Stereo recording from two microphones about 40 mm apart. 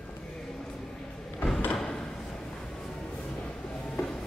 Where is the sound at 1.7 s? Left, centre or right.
Centre.